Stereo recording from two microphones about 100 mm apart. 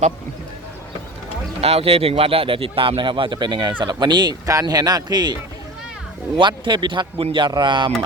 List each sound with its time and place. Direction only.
1.6 s a man's voice: 85° right; by 7.9 s 50° right (ahead or behind)